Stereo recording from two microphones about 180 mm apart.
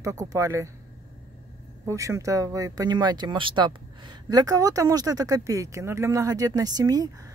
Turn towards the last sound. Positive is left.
turn(degrees=-20)  # may be behind; listen again after turning